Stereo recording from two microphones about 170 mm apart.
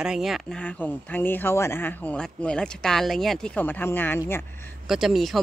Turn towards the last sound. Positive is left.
turn(degrees=0)  # may be behind; listen again after turning